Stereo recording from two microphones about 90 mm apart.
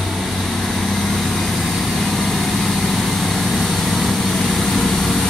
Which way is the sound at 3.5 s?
Centre (ahead or behind).